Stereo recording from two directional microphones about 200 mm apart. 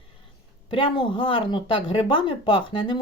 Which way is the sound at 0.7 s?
25° left (ahead or behind).